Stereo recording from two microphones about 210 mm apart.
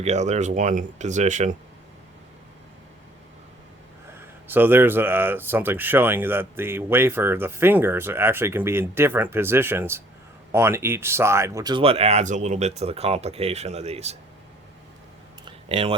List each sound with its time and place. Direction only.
0.0 s speech: 30° right (ahead or behind)
4.2 s speech: 10° right (ahead or behind); by 14.2 s 30° right (ahead or behind)
15.4 s a sound: 25° right (ahead or behind)